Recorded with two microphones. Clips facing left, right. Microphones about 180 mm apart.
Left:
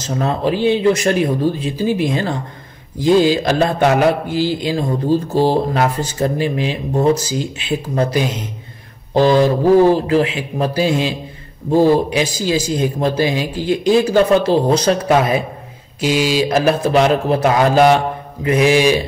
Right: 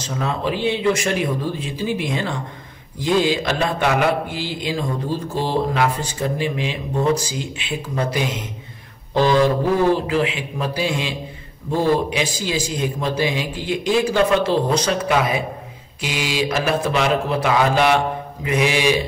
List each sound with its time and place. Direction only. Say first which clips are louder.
0.0 s a man's voice: left 5 dB; 40° left (ahead or behind)